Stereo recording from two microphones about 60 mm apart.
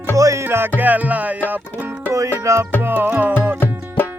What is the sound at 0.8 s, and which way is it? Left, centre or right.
Music, right.